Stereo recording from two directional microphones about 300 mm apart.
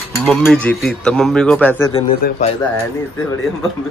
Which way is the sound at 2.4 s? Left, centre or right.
Left.